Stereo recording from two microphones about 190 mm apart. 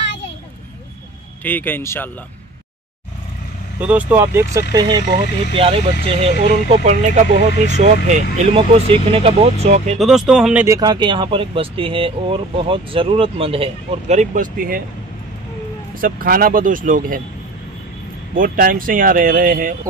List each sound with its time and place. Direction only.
1.4 s speech: 10° left (ahead or behind)
3.8 s speech: 10° right (ahead or behind); by 9.9 s 35° right (ahead or behind)
9.9 s speech: centre (ahead or behind); by 14.8 s 45° right (ahead or behind)
16.0 s speech: 50° right (ahead or behind)
18.3 s speech: 45° right (ahead or behind)